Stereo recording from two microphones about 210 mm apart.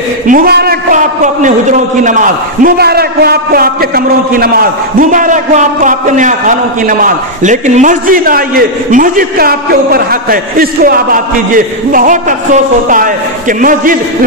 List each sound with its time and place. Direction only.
0.3 s a man's voice: 45° right (ahead or behind)